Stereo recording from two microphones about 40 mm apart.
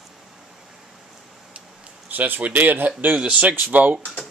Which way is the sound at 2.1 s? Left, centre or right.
Right.